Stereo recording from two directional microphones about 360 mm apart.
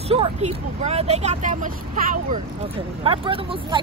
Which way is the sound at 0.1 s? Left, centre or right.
Centre.